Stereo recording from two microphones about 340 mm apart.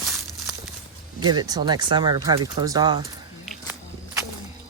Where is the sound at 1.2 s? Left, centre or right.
Centre.